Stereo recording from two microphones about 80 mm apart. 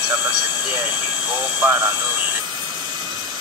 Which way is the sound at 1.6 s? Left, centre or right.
Right.